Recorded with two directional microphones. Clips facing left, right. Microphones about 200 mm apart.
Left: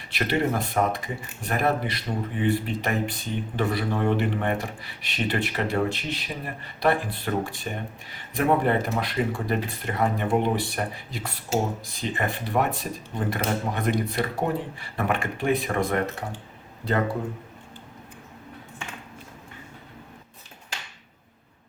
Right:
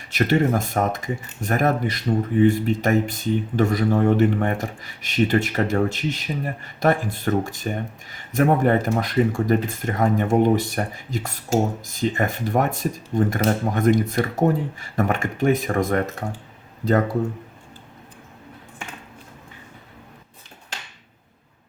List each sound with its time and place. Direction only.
0.1 s speech: 45° right (ahead or behind)